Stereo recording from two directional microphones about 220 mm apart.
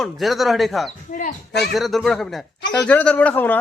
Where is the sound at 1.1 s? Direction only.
35° left (ahead or behind).